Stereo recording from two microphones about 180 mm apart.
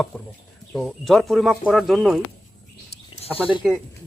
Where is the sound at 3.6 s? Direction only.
5° right (ahead or behind).